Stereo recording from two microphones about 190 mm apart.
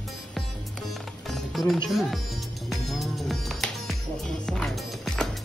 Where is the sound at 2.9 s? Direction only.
Centre (ahead or behind).